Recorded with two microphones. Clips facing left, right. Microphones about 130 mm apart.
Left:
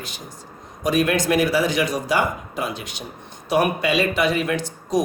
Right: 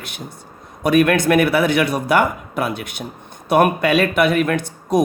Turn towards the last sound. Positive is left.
turn(degrees=-55)  # may be behind; listen again after turning